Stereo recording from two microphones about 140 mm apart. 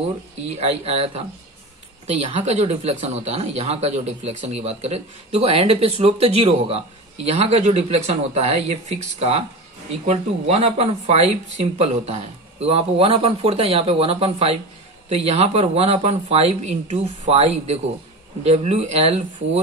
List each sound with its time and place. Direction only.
0.6 s speech: 45° right (ahead or behind)
2.3 s speech: 45° right (ahead or behind)